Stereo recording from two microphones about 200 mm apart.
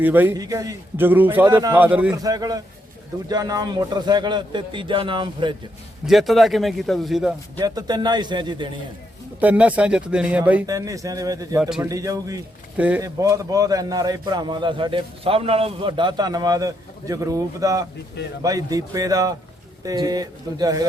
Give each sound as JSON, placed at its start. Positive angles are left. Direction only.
{"t": 0.0, "sound": "a man's voice", "side_deg": -10}
{"t": 2.2, "sound": "a man's voice", "side_deg": -20}
{"t": 6.1, "sound": "speech", "side_deg": 0}
{"t": 7.6, "sound": "a man's voice", "side_deg": -20}
{"t": 9.4, "sound": "a man's voice", "side_deg": -5}
{"t": 12.7, "sound": "a man's voice", "side_deg": -5}
{"t": 13.1, "sound": "a man's voice", "side_deg": -15}